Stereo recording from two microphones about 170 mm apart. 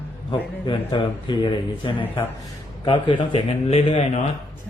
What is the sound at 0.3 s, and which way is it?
A man's voice, 30° left (ahead or behind).